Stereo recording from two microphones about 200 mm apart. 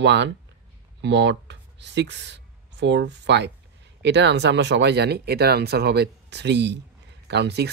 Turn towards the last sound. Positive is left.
turn(degrees=-55)  # may be behind; listen again after turning